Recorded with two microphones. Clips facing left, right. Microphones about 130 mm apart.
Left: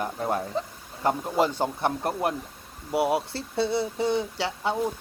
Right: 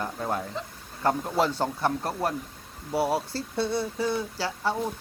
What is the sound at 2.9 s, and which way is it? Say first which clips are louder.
Speech: left 2 dB; centre (ahead or behind).